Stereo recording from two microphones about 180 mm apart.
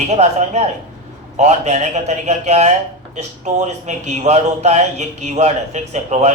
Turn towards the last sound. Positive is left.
turn(degrees=-40)  # may be behind; listen again after turning